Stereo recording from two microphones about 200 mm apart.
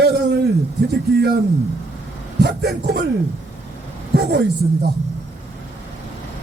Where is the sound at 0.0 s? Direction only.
50° right (ahead or behind).